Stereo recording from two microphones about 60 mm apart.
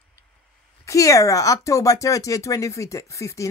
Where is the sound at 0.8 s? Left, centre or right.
Left.